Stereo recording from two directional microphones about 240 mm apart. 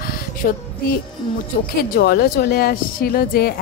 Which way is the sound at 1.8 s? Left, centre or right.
Left.